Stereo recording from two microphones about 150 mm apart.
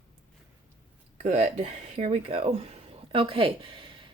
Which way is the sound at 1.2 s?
45° right (ahead or behind).